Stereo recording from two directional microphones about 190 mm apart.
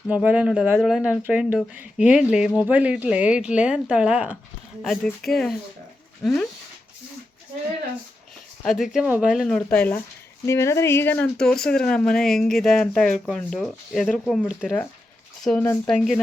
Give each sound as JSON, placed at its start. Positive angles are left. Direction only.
{"t": 0.1, "sound": "speech", "side_deg": -5}
{"t": 8.8, "sound": "speech", "side_deg": 0}
{"t": 16.0, "sound": "speech", "side_deg": 0}